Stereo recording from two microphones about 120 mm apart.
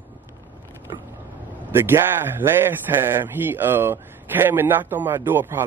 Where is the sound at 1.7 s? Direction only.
20° right (ahead or behind).